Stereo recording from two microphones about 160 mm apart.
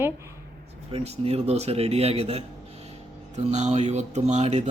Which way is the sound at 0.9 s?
40° right (ahead or behind).